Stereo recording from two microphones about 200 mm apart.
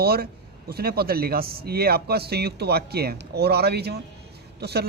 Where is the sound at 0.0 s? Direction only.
50° right (ahead or behind).